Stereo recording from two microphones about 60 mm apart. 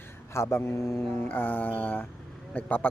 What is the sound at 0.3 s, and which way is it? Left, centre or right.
Speech, left.